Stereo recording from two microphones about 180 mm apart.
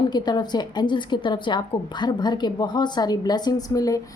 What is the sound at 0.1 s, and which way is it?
A woman's voice, 25° left (ahead or behind).